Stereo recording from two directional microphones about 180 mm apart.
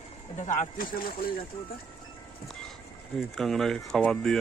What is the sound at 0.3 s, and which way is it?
Speech, 40° left (ahead or behind).